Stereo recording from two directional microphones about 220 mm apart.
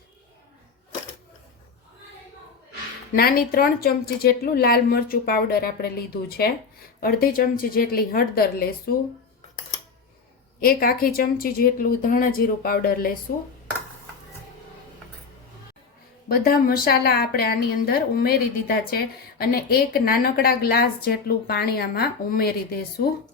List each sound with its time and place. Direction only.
3.2 s a woman's voice: 40° left (ahead or behind)
10.6 s a woman's voice: 40° left (ahead or behind)
16.3 s a woman's voice: 40° left (ahead or behind)